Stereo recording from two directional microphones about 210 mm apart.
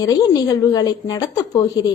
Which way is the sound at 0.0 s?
15° left (ahead or behind).